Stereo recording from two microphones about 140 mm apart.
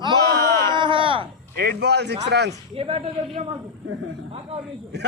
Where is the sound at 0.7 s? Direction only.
35° right (ahead or behind).